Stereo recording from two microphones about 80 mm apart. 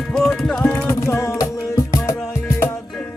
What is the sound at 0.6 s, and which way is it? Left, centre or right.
Music, left.